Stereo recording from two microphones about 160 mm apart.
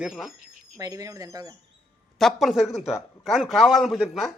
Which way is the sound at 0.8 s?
20° right (ahead or behind).